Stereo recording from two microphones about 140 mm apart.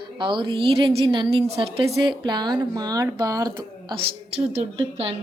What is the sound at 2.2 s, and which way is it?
A woman's voice, 30° right (ahead or behind).